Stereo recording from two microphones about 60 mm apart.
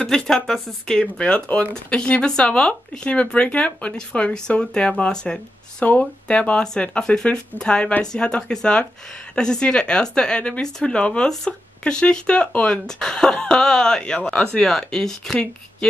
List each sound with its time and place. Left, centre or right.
0.0 s speech: centre